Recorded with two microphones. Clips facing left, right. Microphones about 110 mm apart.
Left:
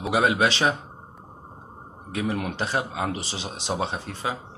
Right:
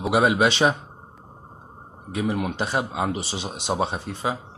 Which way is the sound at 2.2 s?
10° right (ahead or behind).